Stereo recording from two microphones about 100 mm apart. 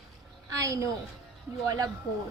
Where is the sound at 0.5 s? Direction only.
35° right (ahead or behind).